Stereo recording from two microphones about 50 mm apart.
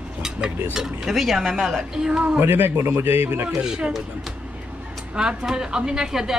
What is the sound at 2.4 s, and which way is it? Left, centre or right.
A man's voice, right.